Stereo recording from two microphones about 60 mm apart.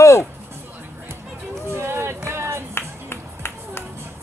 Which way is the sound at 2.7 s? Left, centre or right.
Left.